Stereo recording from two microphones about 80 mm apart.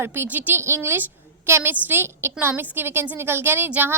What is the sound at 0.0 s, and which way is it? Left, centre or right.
A woman's voice, right.